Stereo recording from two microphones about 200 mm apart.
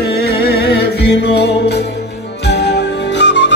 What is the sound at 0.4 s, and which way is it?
Music, 55° left (ahead or behind).